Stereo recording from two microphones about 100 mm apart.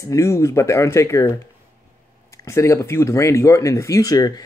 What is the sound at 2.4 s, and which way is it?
Speech, 30° left (ahead or behind).